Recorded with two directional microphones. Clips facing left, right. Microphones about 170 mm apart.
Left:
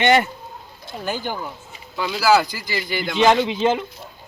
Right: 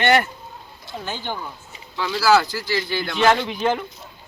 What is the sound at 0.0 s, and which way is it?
Speech, 15° left (ahead or behind).